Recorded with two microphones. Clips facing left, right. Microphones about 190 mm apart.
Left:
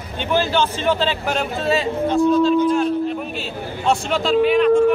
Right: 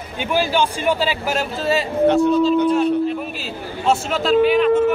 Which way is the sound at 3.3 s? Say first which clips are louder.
Left 1 dB; centre (ahead or behind).